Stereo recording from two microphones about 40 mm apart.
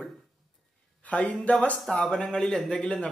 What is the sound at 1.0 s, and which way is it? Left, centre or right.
Speech, left.